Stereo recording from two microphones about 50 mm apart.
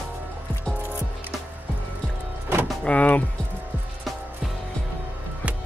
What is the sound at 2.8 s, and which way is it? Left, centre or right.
Speech, left.